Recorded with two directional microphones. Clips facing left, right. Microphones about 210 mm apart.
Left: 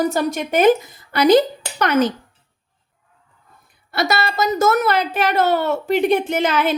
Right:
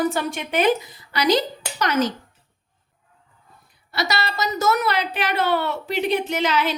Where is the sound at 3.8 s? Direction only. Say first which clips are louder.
Left 5 dB; 50° left (ahead or behind).